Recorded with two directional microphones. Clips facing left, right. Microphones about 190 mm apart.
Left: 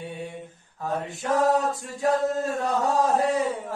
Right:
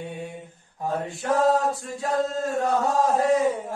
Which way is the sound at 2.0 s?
20° left (ahead or behind).